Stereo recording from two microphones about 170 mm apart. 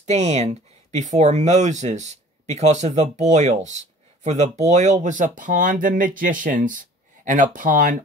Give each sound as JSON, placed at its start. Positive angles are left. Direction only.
{"t": 0.0, "sound": "speech", "side_deg": -40}